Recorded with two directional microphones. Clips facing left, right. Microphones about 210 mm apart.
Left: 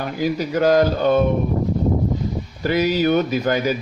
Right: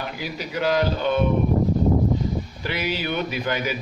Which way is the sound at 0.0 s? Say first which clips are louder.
Left 9 dB; 45° left (ahead or behind).